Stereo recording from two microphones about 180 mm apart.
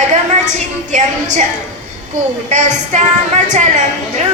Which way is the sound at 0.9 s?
40° right (ahead or behind).